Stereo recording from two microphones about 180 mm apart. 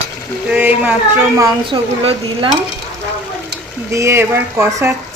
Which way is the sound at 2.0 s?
35° right (ahead or behind).